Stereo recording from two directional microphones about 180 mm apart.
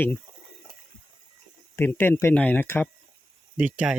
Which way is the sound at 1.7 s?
10° left (ahead or behind).